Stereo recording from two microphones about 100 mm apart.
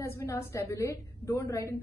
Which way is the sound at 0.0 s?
30° left (ahead or behind).